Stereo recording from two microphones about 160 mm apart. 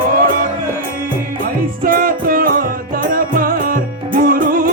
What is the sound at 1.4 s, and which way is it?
Music, 60° right (ahead or behind).